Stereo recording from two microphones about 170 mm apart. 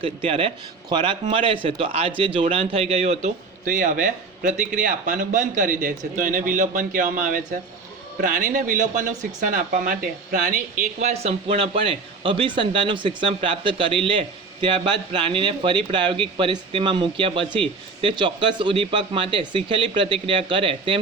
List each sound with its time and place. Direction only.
0.0 s speech: 35° right (ahead or behind); by 10.6 s 55° right (ahead or behind)
11.0 s speech: 40° right (ahead or behind)